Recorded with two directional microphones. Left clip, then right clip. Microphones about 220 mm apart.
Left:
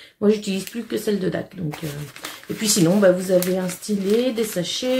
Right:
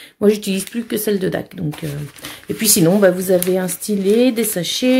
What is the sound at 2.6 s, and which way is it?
Speech, 50° right (ahead or behind).